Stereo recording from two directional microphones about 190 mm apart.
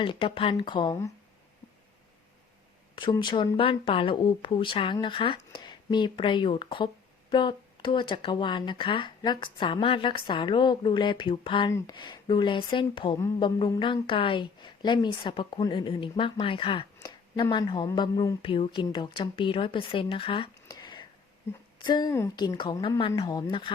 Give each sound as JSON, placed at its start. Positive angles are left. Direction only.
{"t": 0.0, "sound": "speech", "side_deg": 25}
{"t": 2.9, "sound": "speech", "side_deg": 25}